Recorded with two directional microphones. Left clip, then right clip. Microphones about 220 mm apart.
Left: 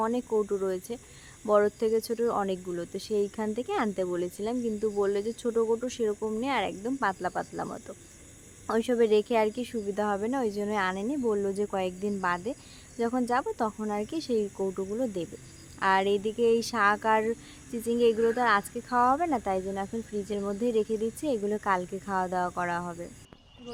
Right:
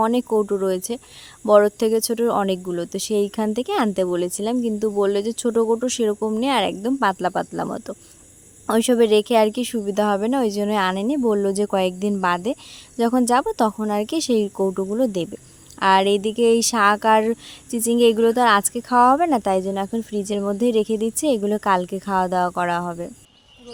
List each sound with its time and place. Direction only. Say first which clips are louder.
0.0 s speech: right 9 dB; 45° right (ahead or behind)